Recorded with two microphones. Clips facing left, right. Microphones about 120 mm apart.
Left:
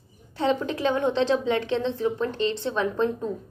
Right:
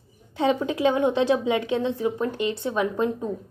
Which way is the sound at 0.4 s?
15° right (ahead or behind).